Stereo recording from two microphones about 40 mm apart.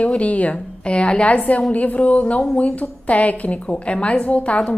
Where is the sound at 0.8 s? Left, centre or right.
Left.